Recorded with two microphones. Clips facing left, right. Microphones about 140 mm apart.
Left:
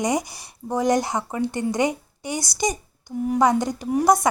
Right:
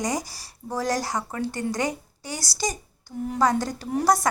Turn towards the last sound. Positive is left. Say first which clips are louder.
# left 3 dB
turn(degrees=20)  # may be behind; listen again after turning